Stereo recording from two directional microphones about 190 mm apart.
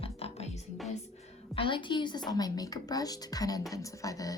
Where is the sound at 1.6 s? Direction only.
25° left (ahead or behind).